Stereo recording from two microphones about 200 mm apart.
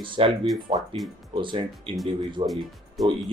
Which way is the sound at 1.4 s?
25° right (ahead or behind).